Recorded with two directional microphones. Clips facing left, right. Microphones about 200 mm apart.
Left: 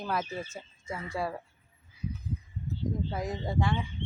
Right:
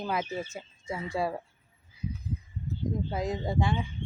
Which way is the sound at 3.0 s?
20° right (ahead or behind).